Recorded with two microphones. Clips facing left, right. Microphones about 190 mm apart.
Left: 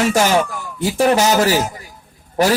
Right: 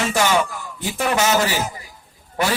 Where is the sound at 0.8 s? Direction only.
35° left (ahead or behind).